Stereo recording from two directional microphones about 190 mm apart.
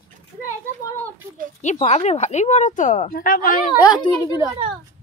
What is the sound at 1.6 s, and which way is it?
Speech, 40° left (ahead or behind).